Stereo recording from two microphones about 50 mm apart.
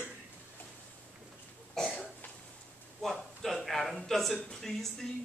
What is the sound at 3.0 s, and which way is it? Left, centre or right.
A man's voice, centre.